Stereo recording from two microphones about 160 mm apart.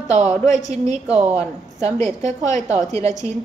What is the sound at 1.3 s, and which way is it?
A woman's voice, 45° right (ahead or behind).